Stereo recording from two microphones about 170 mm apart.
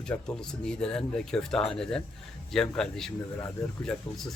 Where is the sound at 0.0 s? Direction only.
5° left (ahead or behind).